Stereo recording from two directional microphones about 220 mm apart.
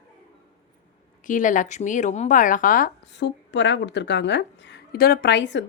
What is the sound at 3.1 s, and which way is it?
Speech, 55° left (ahead or behind).